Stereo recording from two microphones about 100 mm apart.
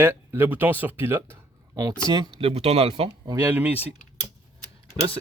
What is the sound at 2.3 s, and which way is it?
Speech, 80° right.